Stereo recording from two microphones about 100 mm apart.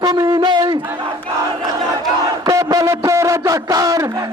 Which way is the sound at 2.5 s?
35° right (ahead or behind).